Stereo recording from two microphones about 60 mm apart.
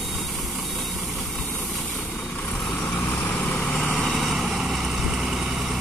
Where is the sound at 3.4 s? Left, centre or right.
Centre.